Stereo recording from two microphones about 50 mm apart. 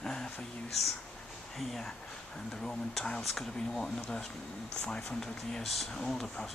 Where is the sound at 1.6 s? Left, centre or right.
Centre.